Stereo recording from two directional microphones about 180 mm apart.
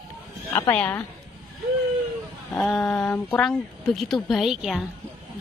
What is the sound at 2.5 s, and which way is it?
A woman's voice, 5° left (ahead or behind).